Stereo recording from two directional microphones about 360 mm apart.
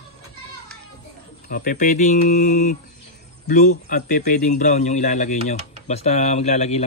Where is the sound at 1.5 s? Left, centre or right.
Left.